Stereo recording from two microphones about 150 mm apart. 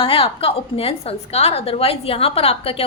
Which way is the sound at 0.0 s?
35° left (ahead or behind).